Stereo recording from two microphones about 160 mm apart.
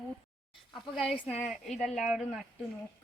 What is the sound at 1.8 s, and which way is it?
Speech, 50° left (ahead or behind).